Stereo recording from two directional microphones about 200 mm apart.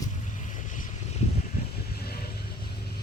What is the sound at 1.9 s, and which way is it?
Vehicle, 50° left (ahead or behind).